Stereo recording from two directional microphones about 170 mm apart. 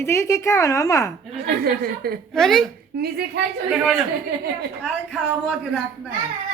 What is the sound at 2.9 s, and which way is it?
Speech, 70° right (ahead or behind).